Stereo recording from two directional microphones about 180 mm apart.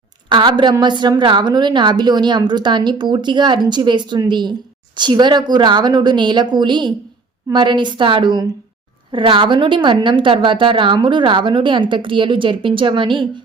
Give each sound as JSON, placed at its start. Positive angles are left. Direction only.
{"t": 0.3, "sound": "a woman's voice", "side_deg": -25}